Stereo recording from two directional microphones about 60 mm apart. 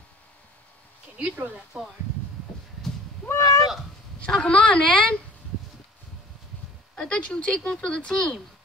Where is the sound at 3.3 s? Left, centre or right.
Left.